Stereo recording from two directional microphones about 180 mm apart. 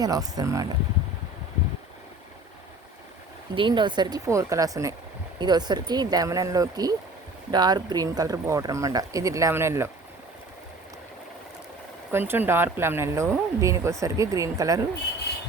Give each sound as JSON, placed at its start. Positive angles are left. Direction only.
{"t": 0.0, "sound": "speech", "side_deg": -20}
{"t": 3.5, "sound": "speech", "side_deg": -25}
{"t": 12.1, "sound": "speech", "side_deg": -10}